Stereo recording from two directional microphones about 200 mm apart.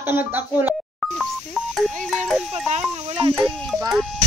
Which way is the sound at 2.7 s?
30° right (ahead or behind).